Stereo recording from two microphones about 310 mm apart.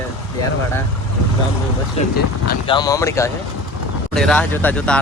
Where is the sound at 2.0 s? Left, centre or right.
Centre.